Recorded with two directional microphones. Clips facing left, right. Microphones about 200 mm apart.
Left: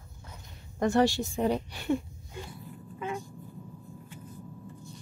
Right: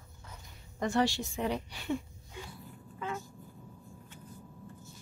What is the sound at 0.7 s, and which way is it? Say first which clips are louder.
Speech: left 5 dB; 50° left (ahead or behind).